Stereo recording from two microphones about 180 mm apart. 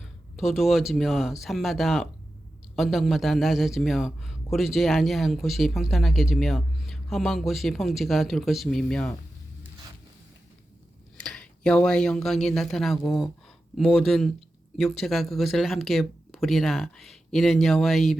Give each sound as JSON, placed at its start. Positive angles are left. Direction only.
{"t": 0.0, "sound": "speech", "side_deg": 0}
{"t": 11.2, "sound": "speech", "side_deg": 5}